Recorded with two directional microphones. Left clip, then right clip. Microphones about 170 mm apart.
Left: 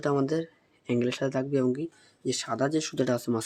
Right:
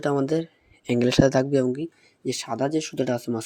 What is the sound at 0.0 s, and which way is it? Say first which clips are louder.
Speech: right 3 dB; 15° right (ahead or behind).